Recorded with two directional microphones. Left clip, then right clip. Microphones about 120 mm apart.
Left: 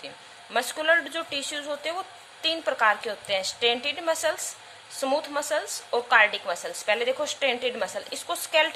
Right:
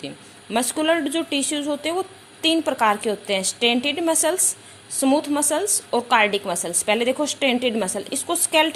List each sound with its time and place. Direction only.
0.5 s a woman's voice: 25° right (ahead or behind)